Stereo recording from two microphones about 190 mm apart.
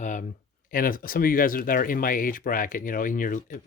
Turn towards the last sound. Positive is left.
turn(degrees=45)  # may be behind; listen again after turning